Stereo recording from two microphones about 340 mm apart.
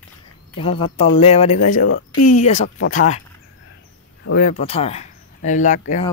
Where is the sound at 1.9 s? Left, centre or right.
Left.